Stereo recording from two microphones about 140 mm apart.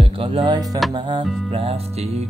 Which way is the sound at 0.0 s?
40° right (ahead or behind).